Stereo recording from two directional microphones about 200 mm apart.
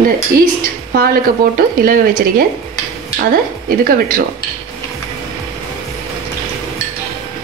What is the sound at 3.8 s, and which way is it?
Speech, 45° right (ahead or behind).